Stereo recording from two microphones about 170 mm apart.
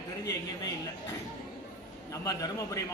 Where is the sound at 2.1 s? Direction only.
20° left (ahead or behind).